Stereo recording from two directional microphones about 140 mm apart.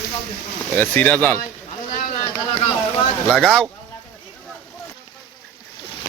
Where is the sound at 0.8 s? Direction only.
10° left (ahead or behind).